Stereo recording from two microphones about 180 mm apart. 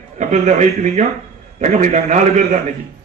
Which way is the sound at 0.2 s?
40° right (ahead or behind).